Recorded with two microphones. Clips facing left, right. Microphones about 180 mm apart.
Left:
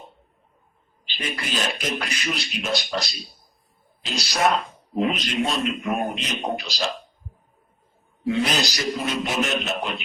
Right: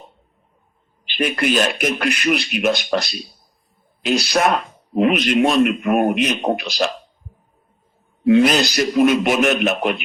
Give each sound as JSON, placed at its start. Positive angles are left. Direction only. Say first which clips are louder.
{"t": 1.1, "sound": "speech", "louder": "right 11 dB", "side_deg": -65}
{"t": 8.3, "sound": "speech", "louder": "right 9 dB", "side_deg": -65}